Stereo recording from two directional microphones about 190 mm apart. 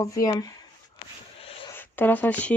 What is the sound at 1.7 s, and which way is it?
Speech, 10° left (ahead or behind).